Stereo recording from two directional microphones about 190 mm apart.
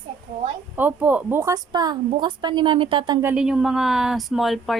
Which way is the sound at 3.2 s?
5° right (ahead or behind).